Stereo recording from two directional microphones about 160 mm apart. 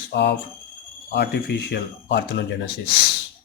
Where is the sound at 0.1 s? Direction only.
90° left.